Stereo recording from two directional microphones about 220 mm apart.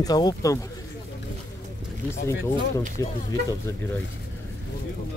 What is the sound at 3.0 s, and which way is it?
Speech, 15° left (ahead or behind).